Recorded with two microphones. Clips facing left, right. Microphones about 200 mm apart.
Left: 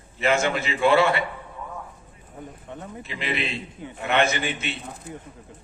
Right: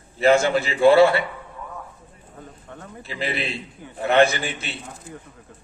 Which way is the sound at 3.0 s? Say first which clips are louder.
Right 2 dB; 35° right (ahead or behind).